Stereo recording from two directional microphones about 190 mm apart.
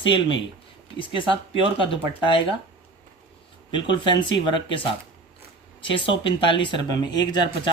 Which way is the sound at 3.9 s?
25° left (ahead or behind).